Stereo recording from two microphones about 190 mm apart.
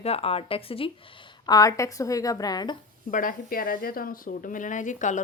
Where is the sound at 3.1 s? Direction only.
45° left (ahead or behind).